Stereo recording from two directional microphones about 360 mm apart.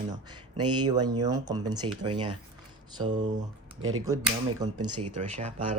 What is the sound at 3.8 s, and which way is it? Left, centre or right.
Speech, right.